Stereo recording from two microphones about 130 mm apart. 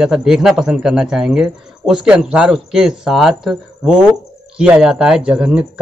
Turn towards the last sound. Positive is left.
turn(degrees=-10)  # may be behind; listen again after turning